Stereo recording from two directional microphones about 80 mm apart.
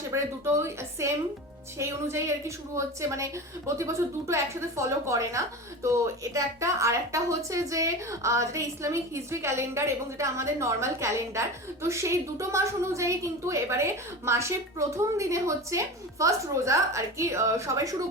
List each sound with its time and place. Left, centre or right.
0.1 s a woman's voice: right